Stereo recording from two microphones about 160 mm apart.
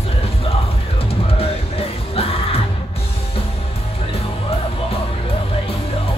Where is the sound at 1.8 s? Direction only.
40° left (ahead or behind).